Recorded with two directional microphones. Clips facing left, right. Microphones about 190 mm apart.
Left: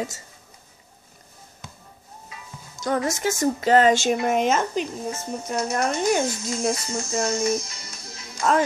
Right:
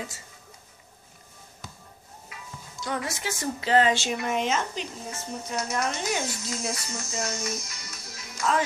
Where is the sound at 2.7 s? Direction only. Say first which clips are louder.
Left 7 dB; 45° left (ahead or behind).